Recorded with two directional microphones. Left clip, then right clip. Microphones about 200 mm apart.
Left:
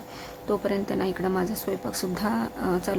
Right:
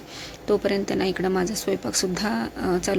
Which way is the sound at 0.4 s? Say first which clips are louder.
Right 4 dB; 5° right (ahead or behind).